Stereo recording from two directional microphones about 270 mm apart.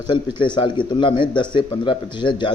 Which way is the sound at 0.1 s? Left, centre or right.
Centre.